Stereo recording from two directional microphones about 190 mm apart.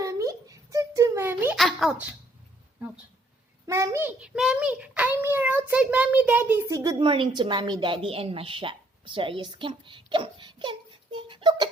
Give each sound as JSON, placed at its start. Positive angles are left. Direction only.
{"t": 0.0, "sound": "a sound", "side_deg": -15}
{"t": 1.5, "sound": "speech", "side_deg": 0}
{"t": 3.7, "sound": "a child's voice", "side_deg": -15}